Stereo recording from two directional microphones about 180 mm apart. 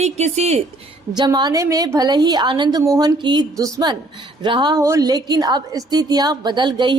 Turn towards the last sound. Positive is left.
turn(degrees=-25)  # may be behind; listen again after turning